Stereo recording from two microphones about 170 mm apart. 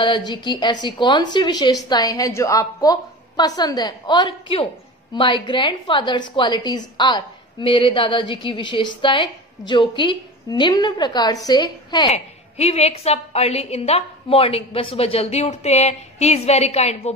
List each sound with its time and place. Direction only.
0.0 s a woman's voice: 25° left (ahead or behind)
12.1 s a woman's voice: 40° left (ahead or behind)